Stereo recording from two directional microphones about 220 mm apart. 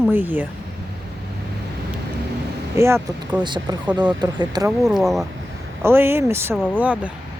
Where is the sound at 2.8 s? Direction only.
10° right (ahead or behind).